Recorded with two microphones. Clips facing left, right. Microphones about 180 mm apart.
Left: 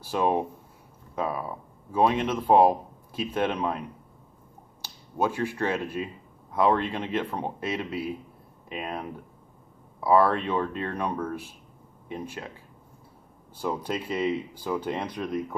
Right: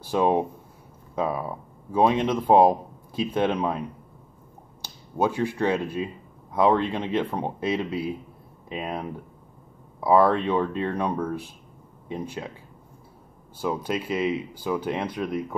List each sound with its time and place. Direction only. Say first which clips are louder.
0.0 s speech: right 3 dB; 20° right (ahead or behind)
1.9 s speech: right 2 dB; 20° right (ahead or behind)
4.8 s speech: right 3 dB; 15° right (ahead or behind)
13.6 s speech: right 3 dB; 5° right (ahead or behind)